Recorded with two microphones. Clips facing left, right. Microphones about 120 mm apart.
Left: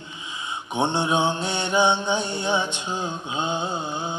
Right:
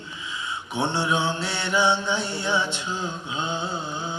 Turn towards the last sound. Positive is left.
turn(degrees=20)  # may be behind; listen again after turning